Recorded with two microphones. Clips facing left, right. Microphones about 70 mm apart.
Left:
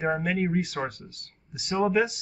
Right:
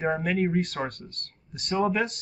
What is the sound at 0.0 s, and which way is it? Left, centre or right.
Speech, centre.